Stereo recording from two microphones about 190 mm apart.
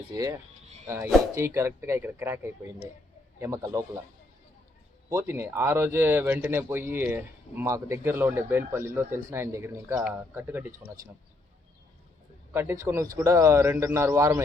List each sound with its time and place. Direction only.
0.1 s speech: 20° right (ahead or behind)
5.0 s speech: 15° right (ahead or behind)
12.5 s speech: 15° right (ahead or behind)